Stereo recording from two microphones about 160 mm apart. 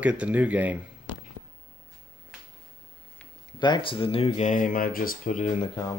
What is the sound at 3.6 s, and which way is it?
Speech, 30° left (ahead or behind).